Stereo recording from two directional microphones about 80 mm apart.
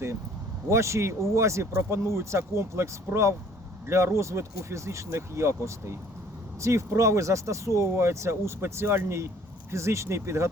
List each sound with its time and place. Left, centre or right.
0.7 s speech: right